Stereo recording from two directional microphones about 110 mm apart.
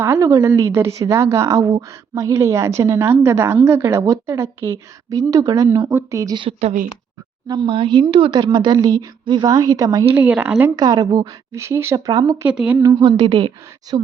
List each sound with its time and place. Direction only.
0.0 s a woman's voice: 25° right (ahead or behind)
5.1 s a woman's voice: 35° right (ahead or behind)
7.4 s speech: 35° right (ahead or behind)
7.7 s a woman's voice: 50° right (ahead or behind)
8.3 s a woman's voice: 40° right (ahead or behind)
10.2 s speech: 15° right (ahead or behind)
10.8 s a woman's voice: 40° right (ahead or behind)
11.5 s a woman's voice: 25° right (ahead or behind)
12.5 s speech: 10° right (ahead or behind)
12.8 s a woman's voice: 40° right (ahead or behind); by 14.1 s 55° right (ahead or behind)